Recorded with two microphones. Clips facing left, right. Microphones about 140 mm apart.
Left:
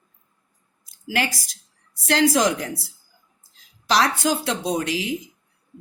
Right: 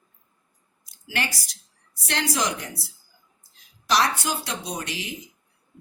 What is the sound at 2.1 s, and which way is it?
Speech, 90° left.